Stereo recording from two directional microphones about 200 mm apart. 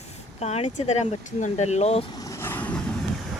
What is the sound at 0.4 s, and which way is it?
Speech, 35° left (ahead or behind).